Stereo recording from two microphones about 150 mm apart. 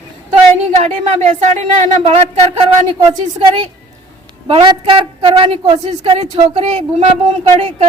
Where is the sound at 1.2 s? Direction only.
50° right (ahead or behind).